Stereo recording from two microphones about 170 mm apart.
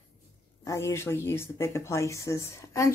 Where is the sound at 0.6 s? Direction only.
15° left (ahead or behind).